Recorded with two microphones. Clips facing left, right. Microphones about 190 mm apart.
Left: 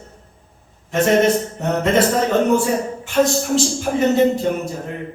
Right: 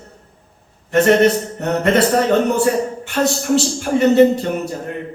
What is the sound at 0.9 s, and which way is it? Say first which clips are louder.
Speech: right 3 dB; 65° right (ahead or behind).